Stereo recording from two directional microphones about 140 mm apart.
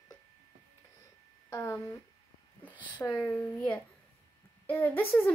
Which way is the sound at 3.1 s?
15° left (ahead or behind).